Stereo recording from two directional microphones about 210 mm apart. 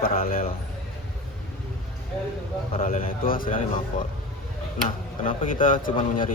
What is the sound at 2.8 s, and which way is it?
A man's voice, 40° left (ahead or behind).